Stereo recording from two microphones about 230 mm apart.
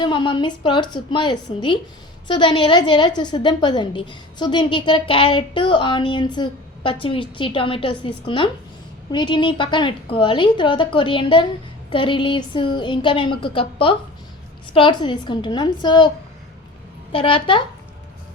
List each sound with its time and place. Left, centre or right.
0.0 s a woman's voice: centre
17.1 s a woman's voice: left